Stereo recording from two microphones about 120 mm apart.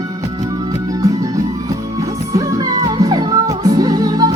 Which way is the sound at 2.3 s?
30° right (ahead or behind).